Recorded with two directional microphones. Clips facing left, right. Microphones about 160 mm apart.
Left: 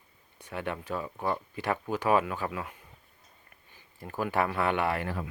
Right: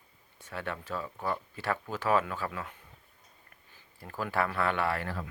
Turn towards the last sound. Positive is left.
turn(degrees=15)  # may be behind; listen again after turning